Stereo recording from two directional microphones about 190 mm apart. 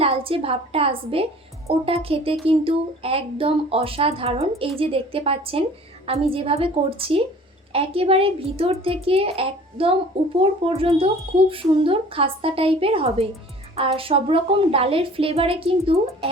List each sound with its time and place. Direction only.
0.0 s a woman's voice: 30° right (ahead or behind)